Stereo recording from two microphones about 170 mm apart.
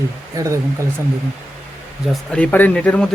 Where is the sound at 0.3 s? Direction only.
20° right (ahead or behind).